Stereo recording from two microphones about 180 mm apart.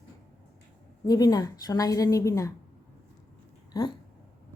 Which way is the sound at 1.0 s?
20° left (ahead or behind).